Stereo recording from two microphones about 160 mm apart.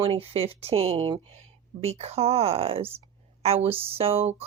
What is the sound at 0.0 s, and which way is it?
Speech, 35° right (ahead or behind).